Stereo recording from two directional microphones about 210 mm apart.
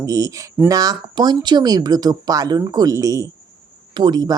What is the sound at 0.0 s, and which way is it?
Speech, 15° right (ahead or behind).